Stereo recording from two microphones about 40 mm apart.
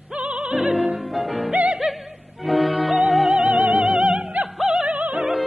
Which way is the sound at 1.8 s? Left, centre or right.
Centre.